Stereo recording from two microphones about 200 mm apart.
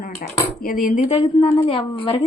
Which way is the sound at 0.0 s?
45° left (ahead or behind).